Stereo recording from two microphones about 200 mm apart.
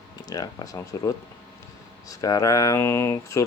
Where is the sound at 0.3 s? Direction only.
20° left (ahead or behind).